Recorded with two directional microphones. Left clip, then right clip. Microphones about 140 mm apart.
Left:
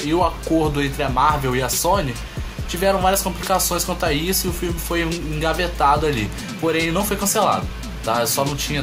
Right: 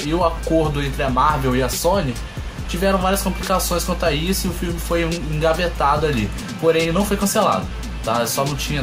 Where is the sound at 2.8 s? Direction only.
15° left (ahead or behind).